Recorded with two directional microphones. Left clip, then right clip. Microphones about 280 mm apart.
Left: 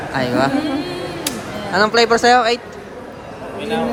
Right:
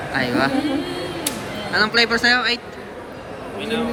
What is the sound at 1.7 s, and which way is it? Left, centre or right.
Speech, centre.